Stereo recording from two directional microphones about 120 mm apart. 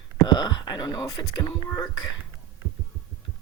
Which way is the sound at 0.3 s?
40° left (ahead or behind).